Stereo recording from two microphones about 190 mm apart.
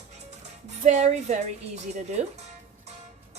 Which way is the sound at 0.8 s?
35° right (ahead or behind).